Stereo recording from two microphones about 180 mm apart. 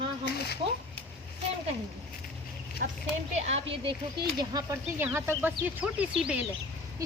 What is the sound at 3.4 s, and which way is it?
Speech, 35° right (ahead or behind).